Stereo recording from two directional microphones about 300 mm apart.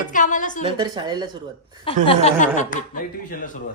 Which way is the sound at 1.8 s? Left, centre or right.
Centre.